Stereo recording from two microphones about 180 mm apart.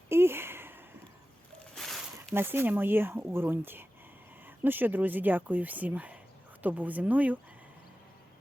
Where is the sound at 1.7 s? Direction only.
Centre (ahead or behind).